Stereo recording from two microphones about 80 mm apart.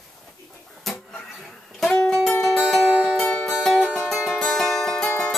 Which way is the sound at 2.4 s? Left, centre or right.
Centre.